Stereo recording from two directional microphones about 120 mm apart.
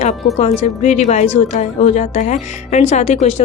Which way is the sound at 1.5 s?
85° left.